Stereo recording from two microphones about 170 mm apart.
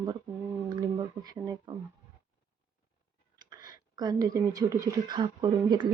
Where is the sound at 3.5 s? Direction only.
25° right (ahead or behind).